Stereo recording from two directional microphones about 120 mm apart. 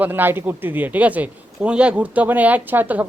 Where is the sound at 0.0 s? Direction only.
15° right (ahead or behind).